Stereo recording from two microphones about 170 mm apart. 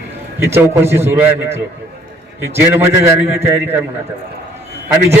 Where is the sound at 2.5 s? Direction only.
15° right (ahead or behind).